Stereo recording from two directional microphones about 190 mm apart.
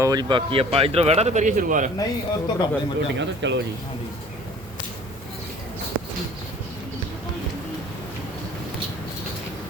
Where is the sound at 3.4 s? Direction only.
70° right (ahead or behind).